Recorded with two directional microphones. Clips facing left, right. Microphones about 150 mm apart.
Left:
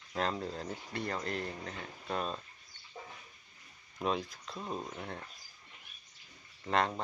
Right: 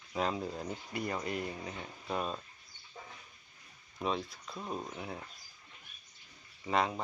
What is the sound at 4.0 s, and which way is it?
Speech, centre (ahead or behind).